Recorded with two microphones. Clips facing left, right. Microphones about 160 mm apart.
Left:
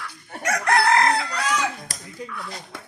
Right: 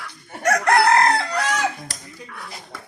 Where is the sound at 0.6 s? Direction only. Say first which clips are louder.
Right 2 dB; 35° right (ahead or behind).